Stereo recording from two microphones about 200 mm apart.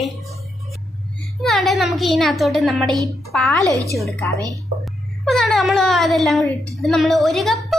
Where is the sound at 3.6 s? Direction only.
15° right (ahead or behind).